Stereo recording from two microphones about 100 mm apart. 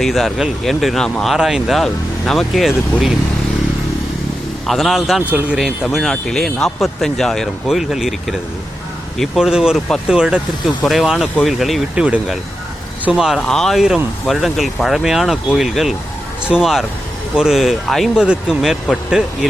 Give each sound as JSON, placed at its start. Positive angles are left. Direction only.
{"t": 0.0, "sound": "speech", "side_deg": 0}
{"t": 4.6, "sound": "speech", "side_deg": 0}
{"t": 5.2, "sound": "speech", "side_deg": -15}
{"t": 5.5, "sound": "speech", "side_deg": 0}